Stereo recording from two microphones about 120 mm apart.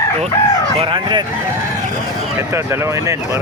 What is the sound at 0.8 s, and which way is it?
Speech, 45° right (ahead or behind).